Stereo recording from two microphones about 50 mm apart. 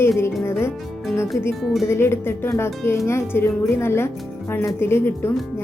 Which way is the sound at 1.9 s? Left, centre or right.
Left.